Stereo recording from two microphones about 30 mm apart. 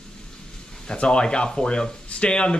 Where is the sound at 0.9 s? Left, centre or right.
Left.